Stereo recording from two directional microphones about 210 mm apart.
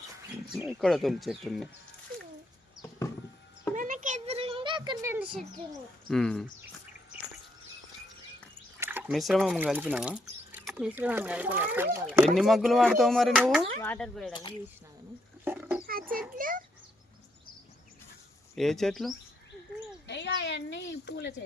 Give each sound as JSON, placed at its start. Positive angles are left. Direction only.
{"t": 0.5, "sound": "speech", "side_deg": -5}
{"t": 3.8, "sound": "a sound", "side_deg": -40}
{"t": 5.2, "sound": "bird", "side_deg": -5}
{"t": 6.1, "sound": "speech", "side_deg": 5}
{"t": 8.8, "sound": "speech", "side_deg": -10}
{"t": 12.4, "sound": "speech", "side_deg": 0}
{"t": 15.4, "sound": "roaring cats", "side_deg": -10}
{"t": 15.9, "sound": "a sound", "side_deg": -45}
{"t": 18.5, "sound": "speech", "side_deg": 0}
{"t": 20.1, "sound": "speech", "side_deg": 55}